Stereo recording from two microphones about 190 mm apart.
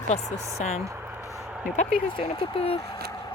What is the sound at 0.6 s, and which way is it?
Speech, 35° left (ahead or behind).